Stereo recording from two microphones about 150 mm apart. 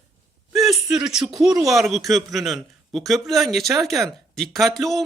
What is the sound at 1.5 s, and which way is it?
Speech, 25° right (ahead or behind).